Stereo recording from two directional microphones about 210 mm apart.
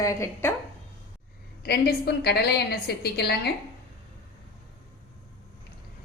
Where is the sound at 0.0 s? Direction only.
15° left (ahead or behind).